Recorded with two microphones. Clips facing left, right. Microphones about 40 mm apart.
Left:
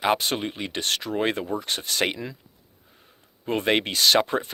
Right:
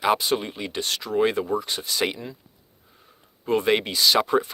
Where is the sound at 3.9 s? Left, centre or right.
Left.